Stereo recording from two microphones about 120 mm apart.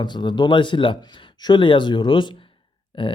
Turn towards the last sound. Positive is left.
turn(degrees=45)  # may be behind; listen again after turning